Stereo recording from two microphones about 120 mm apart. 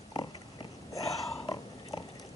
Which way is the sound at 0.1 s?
40° left (ahead or behind).